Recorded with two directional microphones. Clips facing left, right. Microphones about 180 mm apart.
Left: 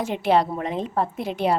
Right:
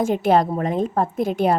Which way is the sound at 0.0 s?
45° right (ahead or behind).